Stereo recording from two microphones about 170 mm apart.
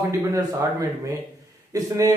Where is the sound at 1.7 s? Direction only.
20° right (ahead or behind).